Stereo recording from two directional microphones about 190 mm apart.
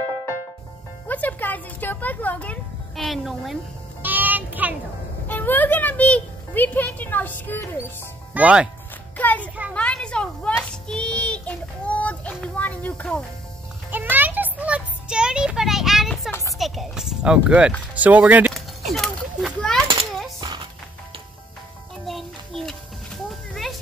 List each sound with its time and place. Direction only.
1.0 s music: 10° left (ahead or behind)
3.0 s speech: centre (ahead or behind)
4.0 s music: 10° right (ahead or behind)
5.2 s speech: 10° left (ahead or behind)
8.4 s speech: 5° right (ahead or behind)
9.1 s a sound: 10° left (ahead or behind)
13.8 s music: 10° right (ahead or behind)
16.3 s a sound: 15° left (ahead or behind)
16.5 s speech: centre (ahead or behind)
18.9 s a sound: centre (ahead or behind)
20.3 s music: 20° right (ahead or behind)
22.0 s music: centre (ahead or behind)
23.2 s a sound: centre (ahead or behind)